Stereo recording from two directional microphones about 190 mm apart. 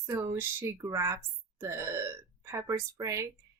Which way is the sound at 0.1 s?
15° right (ahead or behind).